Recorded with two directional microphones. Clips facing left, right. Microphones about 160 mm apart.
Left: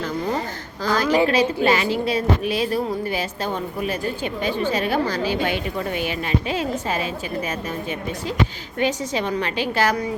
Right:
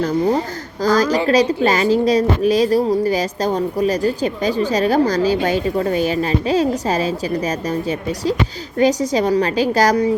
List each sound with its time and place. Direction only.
0.8 s a woman's voice: 40° right (ahead or behind)